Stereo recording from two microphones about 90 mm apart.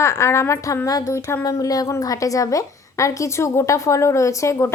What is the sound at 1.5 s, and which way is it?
A woman's voice, 40° left (ahead or behind).